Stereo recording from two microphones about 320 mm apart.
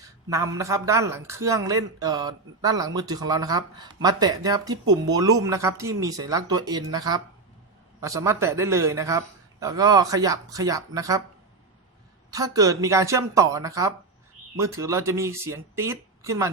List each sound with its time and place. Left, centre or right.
0.3 s speech: centre
12.3 s speech: centre